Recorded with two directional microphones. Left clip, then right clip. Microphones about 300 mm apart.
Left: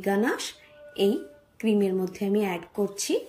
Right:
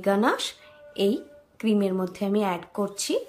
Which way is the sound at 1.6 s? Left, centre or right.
Right.